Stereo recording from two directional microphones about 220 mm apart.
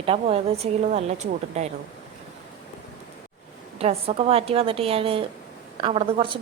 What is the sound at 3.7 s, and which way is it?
A woman's voice, 25° right (ahead or behind).